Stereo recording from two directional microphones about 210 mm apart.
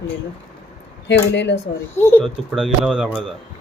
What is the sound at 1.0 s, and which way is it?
Speech, 55° left (ahead or behind).